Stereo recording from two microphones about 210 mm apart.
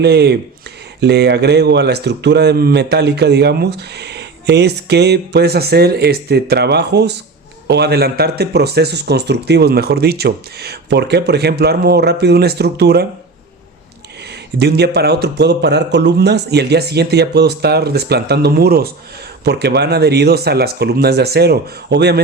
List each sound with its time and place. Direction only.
0.0 s speech: 50° right (ahead or behind)
14.6 s speech: 50° right (ahead or behind)